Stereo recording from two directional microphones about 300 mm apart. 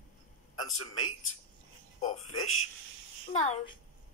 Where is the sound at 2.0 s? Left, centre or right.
Left.